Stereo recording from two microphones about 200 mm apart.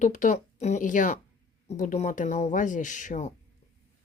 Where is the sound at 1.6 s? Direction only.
35° left (ahead or behind).